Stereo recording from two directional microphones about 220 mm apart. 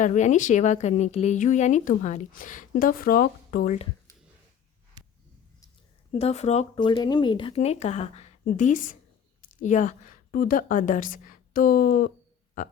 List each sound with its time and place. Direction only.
0.0 s speech: 35° left (ahead or behind)
6.1 s a woman's voice: 30° left (ahead or behind)